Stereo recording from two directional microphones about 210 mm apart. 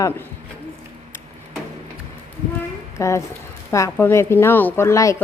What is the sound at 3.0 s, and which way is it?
Speech, 15° left (ahead or behind).